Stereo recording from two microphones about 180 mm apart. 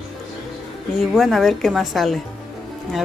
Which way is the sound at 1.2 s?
Centre (ahead or behind).